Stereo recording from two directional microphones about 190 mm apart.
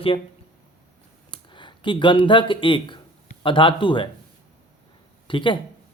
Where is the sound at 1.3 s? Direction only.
25° left (ahead or behind).